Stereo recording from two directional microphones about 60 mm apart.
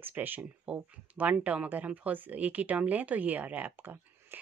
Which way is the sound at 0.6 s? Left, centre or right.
Right.